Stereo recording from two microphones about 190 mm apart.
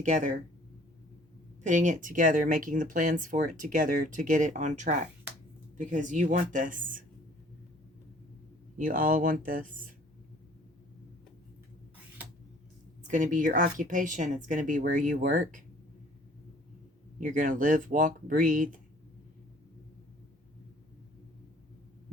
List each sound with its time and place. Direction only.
0.0 s speech: 40° right (ahead or behind)
1.6 s speech: 40° right (ahead or behind)
8.8 s speech: 45° right (ahead or behind)
13.1 s speech: 40° right (ahead or behind)
17.2 s speech: 45° right (ahead or behind)